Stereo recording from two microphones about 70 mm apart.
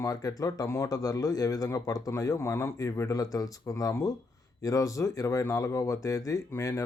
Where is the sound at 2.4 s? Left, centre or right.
Left.